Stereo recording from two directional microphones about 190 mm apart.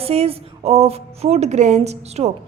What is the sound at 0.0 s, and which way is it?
A woman's voice, 30° right (ahead or behind).